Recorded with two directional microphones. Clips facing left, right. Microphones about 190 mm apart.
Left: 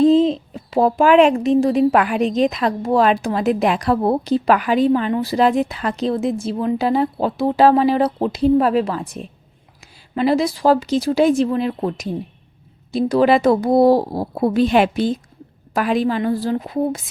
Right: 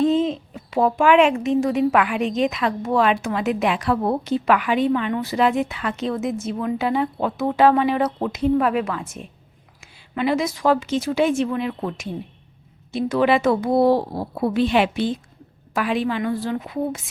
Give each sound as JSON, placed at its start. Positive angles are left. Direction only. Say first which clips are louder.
{"t": 0.0, "sound": "speech", "louder": "left 6 dB", "side_deg": 35}